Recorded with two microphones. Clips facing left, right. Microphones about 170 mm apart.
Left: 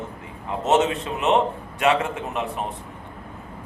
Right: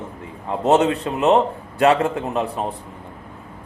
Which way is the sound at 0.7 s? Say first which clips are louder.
Right 4 dB; 35° right (ahead or behind).